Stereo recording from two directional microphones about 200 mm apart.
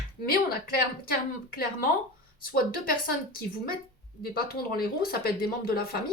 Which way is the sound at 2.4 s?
45° left (ahead or behind).